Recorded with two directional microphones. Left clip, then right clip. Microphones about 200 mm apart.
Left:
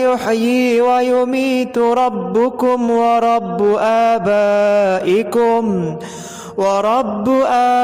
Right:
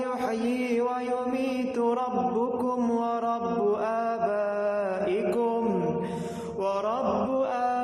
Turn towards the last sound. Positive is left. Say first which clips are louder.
# left 14 dB
turn(degrees=50)  # may be behind; listen again after turning